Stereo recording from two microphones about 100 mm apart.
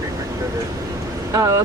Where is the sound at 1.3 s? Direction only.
35° right (ahead or behind).